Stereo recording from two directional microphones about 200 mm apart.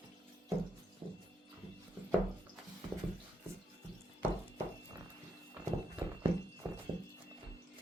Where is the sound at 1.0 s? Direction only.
25° right (ahead or behind).